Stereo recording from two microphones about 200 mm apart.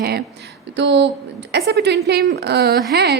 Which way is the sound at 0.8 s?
65° right (ahead or behind).